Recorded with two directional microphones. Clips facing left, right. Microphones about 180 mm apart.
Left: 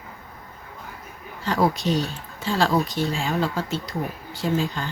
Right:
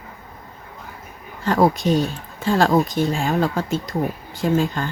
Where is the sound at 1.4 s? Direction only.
50° right (ahead or behind).